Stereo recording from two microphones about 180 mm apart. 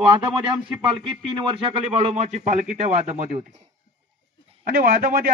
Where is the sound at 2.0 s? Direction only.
40° right (ahead or behind).